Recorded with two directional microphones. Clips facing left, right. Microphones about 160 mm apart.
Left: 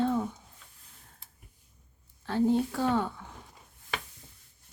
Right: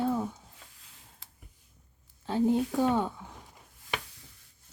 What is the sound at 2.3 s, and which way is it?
Speech, 15° right (ahead or behind).